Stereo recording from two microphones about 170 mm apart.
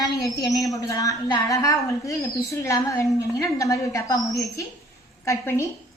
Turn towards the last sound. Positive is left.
turn(degrees=15)  # may be behind; listen again after turning